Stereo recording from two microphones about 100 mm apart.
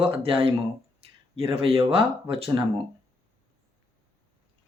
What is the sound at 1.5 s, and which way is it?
Speech, 75° right (ahead or behind).